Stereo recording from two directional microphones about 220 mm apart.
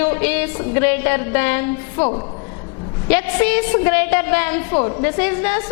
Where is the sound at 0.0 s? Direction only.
10° left (ahead or behind).